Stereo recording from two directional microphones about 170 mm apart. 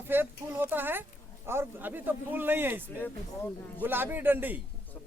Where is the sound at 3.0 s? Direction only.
10° left (ahead or behind).